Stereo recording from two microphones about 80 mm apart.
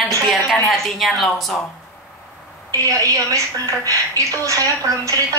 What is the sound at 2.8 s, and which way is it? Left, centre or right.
A woman's voice, right.